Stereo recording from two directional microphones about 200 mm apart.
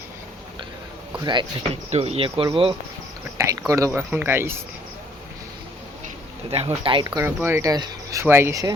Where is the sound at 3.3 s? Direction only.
15° right (ahead or behind).